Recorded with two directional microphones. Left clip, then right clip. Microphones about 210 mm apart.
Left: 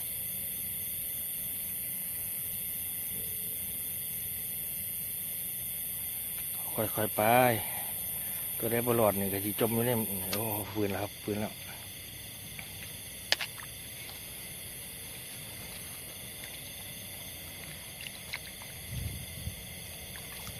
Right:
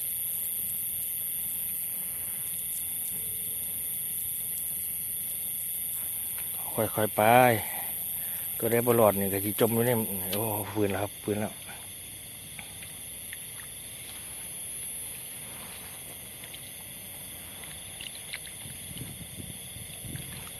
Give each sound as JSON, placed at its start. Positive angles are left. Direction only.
{"t": 6.7, "sound": "speech", "side_deg": -25}
{"t": 8.6, "sound": "speech", "side_deg": -20}